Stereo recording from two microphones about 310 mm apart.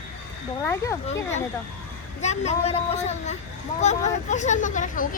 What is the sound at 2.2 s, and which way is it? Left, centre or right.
Speech, left.